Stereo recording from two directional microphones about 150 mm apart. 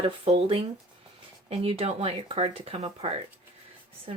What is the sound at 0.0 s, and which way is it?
Speech, 35° right (ahead or behind).